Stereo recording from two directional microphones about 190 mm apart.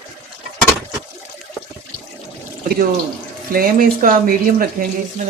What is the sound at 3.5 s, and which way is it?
Speech, 50° right (ahead or behind).